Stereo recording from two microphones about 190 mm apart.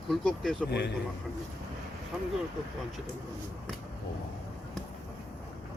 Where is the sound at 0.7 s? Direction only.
60° left (ahead or behind).